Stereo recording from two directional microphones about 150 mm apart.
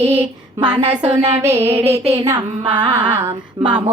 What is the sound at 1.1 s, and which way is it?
Music, 45° right (ahead or behind).